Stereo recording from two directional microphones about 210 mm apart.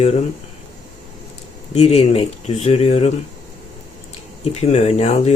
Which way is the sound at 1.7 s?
30° left (ahead or behind).